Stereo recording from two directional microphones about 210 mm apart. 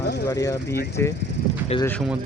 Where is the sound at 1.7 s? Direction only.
25° left (ahead or behind).